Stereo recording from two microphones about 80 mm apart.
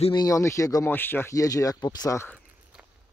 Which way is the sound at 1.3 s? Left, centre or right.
Left.